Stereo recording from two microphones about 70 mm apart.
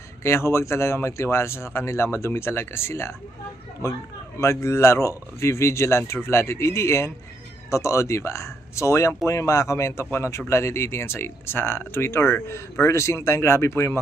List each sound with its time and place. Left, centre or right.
0.2 s speech: left
4.4 s speech: left